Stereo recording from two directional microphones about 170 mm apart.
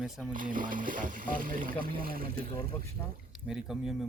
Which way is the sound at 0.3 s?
55° right (ahead or behind).